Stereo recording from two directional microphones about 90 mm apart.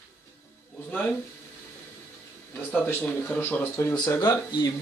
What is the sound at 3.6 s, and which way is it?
Speech, 30° left (ahead or behind).